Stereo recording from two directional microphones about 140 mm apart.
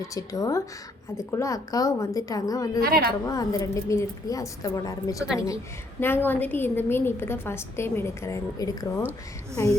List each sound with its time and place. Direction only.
0.0 s a woman's voice: 25° left (ahead or behind)
2.8 s a woman's voice: 90° right
3.2 s a woman's voice: 25° left (ahead or behind)
6.0 s a woman's voice: 15° left (ahead or behind)